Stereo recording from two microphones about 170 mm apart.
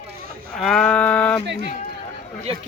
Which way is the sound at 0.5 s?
5° left (ahead or behind).